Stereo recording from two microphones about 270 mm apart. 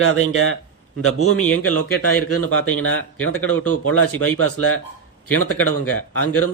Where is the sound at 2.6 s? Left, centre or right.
Left.